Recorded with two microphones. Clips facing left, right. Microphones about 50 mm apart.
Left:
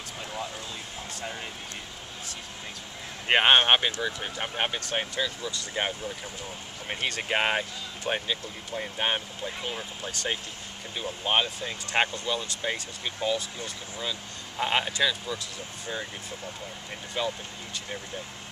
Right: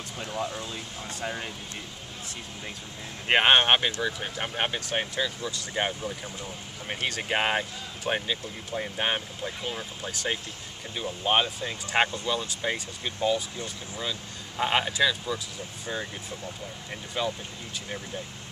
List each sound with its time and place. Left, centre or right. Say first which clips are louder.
1.2 s speech: right 4 dB; centre
3.3 s speech: even; centre
14.6 s speech: right 1 dB; centre
17.2 s speech: right 1 dB; centre